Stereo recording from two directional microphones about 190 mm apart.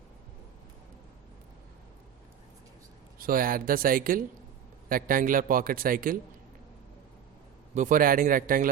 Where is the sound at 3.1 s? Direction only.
50° right (ahead or behind).